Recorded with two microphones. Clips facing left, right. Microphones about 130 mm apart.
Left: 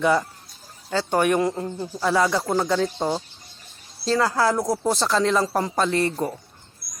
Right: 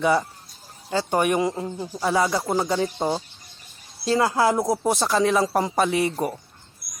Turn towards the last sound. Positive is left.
turn(degrees=-10)  # may be behind; listen again after turning